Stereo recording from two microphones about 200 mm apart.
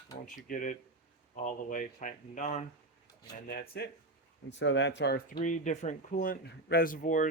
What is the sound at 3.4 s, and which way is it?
Speech, 50° left (ahead or behind).